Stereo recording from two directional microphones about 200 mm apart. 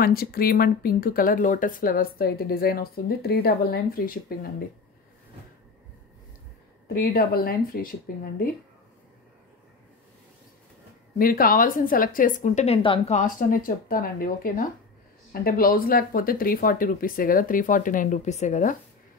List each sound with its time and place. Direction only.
0.0 s speech: 50° left (ahead or behind)
6.9 s speech: 50° left (ahead or behind)
11.1 s speech: 45° left (ahead or behind)